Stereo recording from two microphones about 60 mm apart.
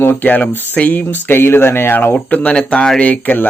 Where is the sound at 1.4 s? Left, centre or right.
Left.